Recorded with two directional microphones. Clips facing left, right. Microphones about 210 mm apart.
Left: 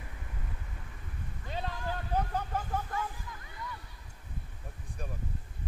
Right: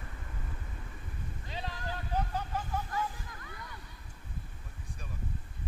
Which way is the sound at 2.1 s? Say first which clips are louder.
Left 2 dB; 55° left (ahead or behind).